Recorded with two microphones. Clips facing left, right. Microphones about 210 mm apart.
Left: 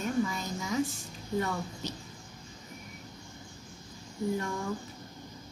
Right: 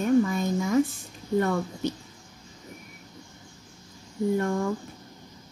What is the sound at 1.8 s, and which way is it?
Speech, 55° right (ahead or behind).